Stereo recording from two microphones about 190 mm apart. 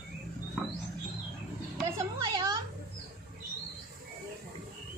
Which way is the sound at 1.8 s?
15° right (ahead or behind).